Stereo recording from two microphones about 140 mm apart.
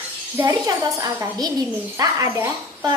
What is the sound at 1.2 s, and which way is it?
A child's voice, 25° right (ahead or behind).